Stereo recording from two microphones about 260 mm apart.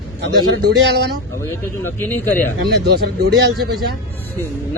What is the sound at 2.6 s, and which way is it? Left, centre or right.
Speech, right.